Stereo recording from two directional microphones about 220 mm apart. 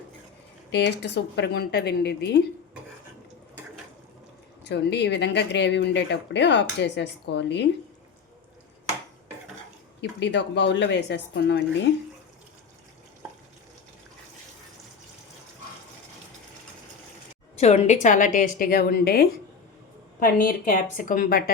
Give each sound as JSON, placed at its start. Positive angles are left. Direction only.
{"t": 0.7, "sound": "speech", "side_deg": 50}
{"t": 4.6, "sound": "speech", "side_deg": 50}
{"t": 10.0, "sound": "speech", "side_deg": 50}
{"t": 17.6, "sound": "a woman's voice", "side_deg": 30}